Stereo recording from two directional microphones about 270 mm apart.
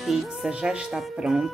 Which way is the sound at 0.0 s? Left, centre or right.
Centre.